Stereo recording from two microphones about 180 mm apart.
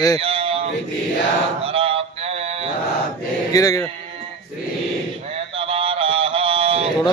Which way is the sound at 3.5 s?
20° left (ahead or behind).